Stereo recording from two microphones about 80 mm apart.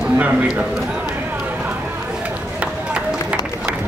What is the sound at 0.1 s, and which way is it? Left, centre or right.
Speech, right.